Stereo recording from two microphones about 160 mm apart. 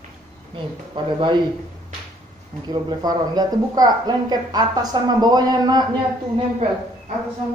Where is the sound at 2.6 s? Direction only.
25° right (ahead or behind).